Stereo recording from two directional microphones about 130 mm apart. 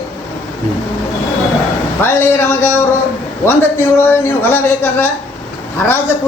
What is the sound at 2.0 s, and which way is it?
Speech, 15° left (ahead or behind).